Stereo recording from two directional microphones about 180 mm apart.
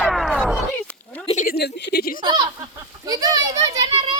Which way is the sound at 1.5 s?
60° left (ahead or behind).